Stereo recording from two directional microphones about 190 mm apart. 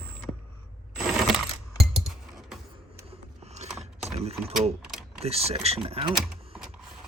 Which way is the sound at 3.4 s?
35° right (ahead or behind).